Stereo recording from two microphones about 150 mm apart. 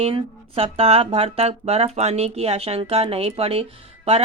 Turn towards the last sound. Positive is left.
turn(degrees=-40)  # may be behind; listen again after turning